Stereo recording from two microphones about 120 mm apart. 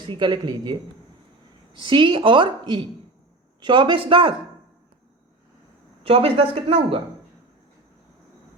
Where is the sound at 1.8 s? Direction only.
40° right (ahead or behind).